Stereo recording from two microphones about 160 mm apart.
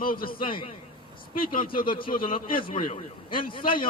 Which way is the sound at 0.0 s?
65° left (ahead or behind).